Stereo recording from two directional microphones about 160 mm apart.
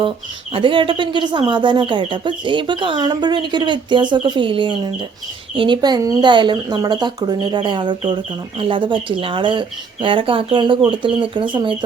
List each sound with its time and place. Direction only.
0.5 s speech: 30° right (ahead or behind)